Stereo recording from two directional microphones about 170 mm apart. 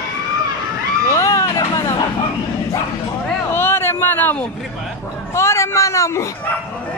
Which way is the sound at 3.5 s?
15° left (ahead or behind).